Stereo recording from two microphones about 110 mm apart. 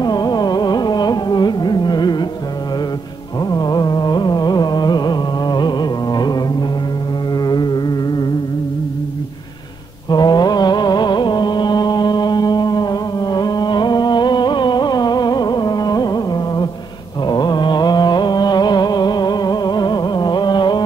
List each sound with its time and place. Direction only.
0.0 s carnatic music: 40° left (ahead or behind)
3.4 s carnatic music: 35° left (ahead or behind)
7.3 s music: 40° left (ahead or behind)
10.0 s music: 40° left (ahead or behind)